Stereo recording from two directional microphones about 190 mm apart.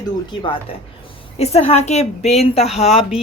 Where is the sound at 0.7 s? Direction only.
30° left (ahead or behind).